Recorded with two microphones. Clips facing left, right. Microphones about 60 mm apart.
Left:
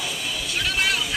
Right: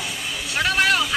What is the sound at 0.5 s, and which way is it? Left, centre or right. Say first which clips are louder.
Vehicle: right 6 dB; right.